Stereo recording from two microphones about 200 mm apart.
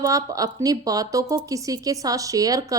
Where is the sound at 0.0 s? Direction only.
15° right (ahead or behind).